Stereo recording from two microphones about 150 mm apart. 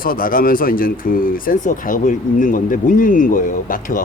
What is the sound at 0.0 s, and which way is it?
A man's voice, 70° left (ahead or behind).